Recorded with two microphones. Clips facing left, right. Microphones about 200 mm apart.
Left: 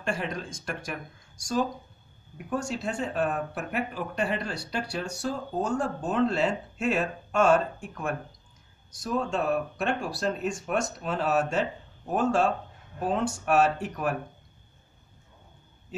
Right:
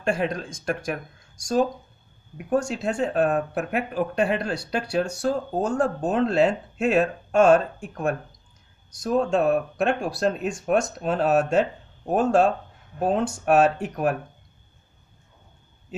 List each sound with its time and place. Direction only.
0.0 s speech: 45° right (ahead or behind)
2.5 s speech: 50° right (ahead or behind)
9.0 s speech: 50° right (ahead or behind)